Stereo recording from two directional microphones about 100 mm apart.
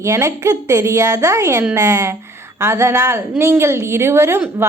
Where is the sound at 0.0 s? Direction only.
30° right (ahead or behind).